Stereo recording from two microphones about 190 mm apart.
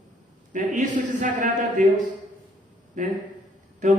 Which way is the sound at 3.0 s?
40° right (ahead or behind).